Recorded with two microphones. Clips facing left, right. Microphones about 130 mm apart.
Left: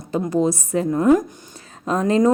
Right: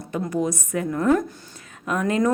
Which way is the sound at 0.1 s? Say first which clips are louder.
Left 5 dB; 30° left (ahead or behind).